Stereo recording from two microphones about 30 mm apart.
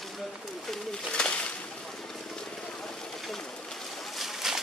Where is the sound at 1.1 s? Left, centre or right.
Left.